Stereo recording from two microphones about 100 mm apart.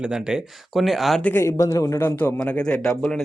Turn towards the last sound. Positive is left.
turn(degrees=10)  # may be behind; listen again after turning